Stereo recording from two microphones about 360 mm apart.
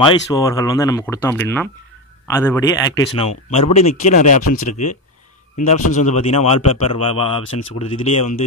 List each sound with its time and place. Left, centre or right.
0.0 s a man's voice: centre
4.4 s speech: left
4.6 s a man's voice: centre
5.9 s speech: centre